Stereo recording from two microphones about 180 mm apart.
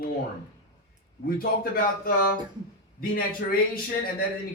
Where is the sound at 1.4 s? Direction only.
55° left (ahead or behind).